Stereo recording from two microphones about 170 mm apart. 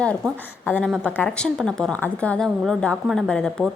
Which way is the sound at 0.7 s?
5° left (ahead or behind).